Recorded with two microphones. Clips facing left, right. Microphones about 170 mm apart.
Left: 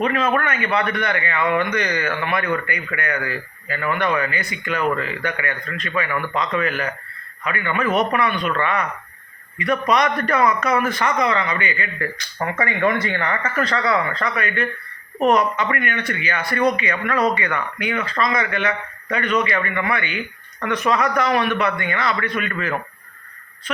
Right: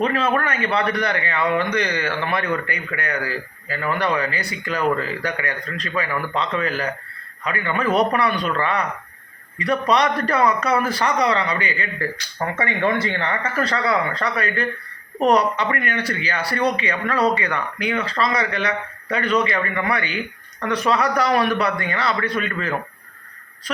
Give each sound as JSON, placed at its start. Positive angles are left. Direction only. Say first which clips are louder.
{"t": 0.0, "sound": "a man's voice", "louder": "even", "side_deg": -30}